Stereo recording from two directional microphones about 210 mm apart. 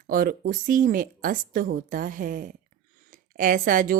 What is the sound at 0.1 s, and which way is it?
A woman's voice, 45° right (ahead or behind).